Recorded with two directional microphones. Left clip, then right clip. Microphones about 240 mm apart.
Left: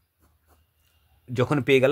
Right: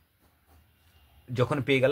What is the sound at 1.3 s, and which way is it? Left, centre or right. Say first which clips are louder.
Speech: left 5 dB; left.